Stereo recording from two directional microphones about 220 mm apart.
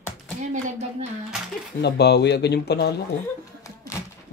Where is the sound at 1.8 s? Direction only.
50° left (ahead or behind).